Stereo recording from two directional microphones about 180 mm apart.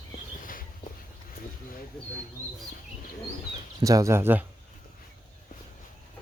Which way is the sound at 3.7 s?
20° right (ahead or behind).